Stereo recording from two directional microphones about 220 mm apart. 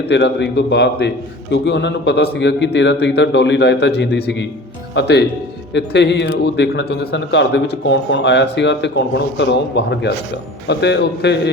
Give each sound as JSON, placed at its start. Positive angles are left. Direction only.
{"t": 0.1, "sound": "a man's voice", "side_deg": 55}